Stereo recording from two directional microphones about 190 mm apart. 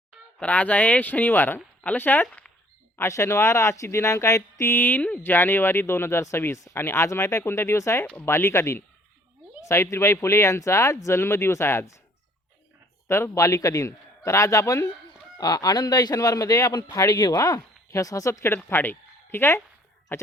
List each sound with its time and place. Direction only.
0.3 s speech: 5° left (ahead or behind)
13.1 s speech: 15° left (ahead or behind)